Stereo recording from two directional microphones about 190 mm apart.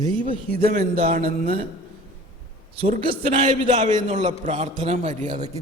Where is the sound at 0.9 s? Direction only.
35° right (ahead or behind).